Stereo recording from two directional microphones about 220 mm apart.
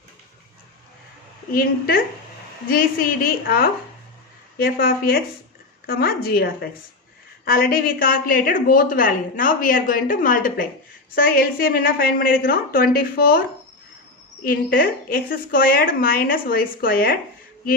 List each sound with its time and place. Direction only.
2.6 s a woman's voice: 40° left (ahead or behind)
14.4 s a woman's voice: 40° left (ahead or behind)